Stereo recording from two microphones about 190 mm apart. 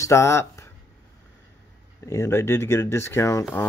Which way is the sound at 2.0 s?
15° left (ahead or behind).